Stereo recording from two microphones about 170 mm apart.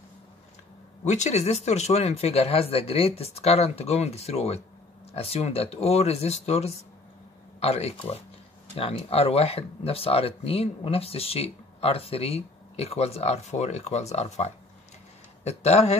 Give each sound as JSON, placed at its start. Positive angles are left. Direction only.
{"t": 1.0, "sound": "speech", "side_deg": 45}